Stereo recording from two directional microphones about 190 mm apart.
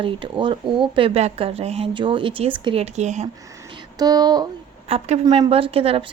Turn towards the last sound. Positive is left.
turn(degrees=-30)  # may be behind; listen again after turning